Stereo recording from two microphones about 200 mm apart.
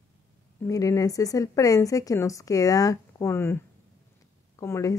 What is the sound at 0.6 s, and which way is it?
A woman's voice, 15° left (ahead or behind).